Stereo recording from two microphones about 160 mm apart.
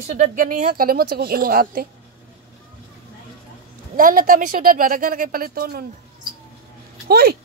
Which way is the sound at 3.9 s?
60° right (ahead or behind).